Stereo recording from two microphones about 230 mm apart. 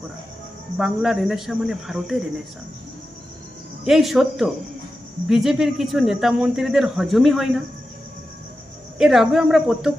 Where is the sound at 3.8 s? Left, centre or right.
Centre.